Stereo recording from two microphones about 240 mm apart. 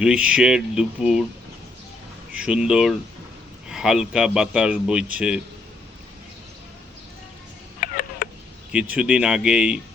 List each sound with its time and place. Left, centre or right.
0.0 s a man's voice: centre
2.3 s a man's voice: centre
7.8 s a sound: left
8.7 s a man's voice: centre